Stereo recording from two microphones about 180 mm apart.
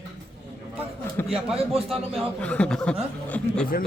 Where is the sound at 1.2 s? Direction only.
10° left (ahead or behind).